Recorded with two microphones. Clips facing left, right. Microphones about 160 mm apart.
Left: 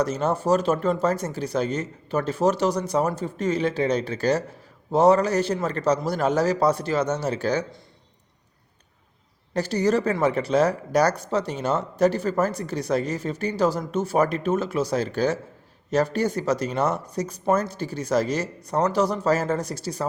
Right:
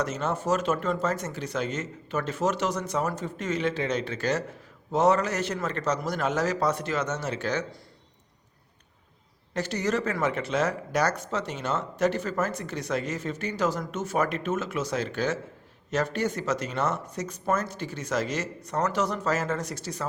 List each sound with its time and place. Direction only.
0.0 s speech: 35° left (ahead or behind)
9.6 s speech: 35° left (ahead or behind)